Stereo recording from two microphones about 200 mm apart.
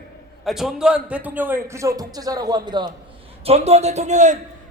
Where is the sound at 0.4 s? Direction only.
Centre (ahead or behind); by 2.8 s 20° right (ahead or behind).